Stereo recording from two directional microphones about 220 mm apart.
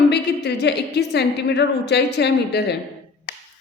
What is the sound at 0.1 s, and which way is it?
A woman's voice, 50° left (ahead or behind).